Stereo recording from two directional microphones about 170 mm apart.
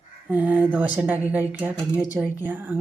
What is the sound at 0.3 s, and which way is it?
A woman's voice, 10° right (ahead or behind).